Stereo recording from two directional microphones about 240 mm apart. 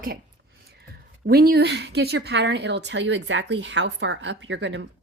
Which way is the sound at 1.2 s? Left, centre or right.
Right.